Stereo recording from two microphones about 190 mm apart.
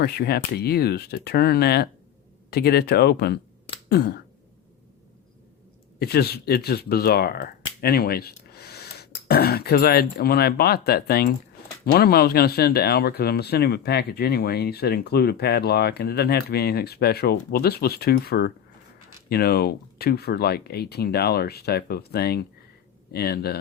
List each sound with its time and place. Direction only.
0.0 s speech: 55° left (ahead or behind)
6.0 s speech: 55° left (ahead or behind)